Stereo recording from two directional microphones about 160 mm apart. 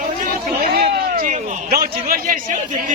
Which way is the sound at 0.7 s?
70° right (ahead or behind).